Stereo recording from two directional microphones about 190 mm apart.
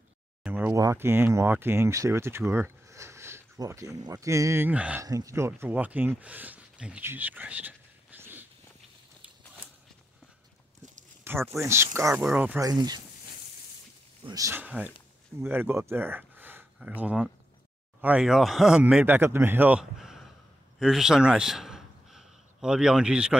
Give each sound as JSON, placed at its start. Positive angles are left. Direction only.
{"t": 0.4, "sound": "speech", "side_deg": -10}
{"t": 11.2, "sound": "a man's voice", "side_deg": -10}
{"t": 12.6, "sound": "speech", "side_deg": -20}
{"t": 14.2, "sound": "a man's voice", "side_deg": -15}